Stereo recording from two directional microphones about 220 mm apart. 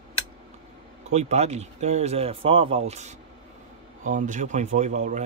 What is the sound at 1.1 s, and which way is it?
Speech, 30° right (ahead or behind).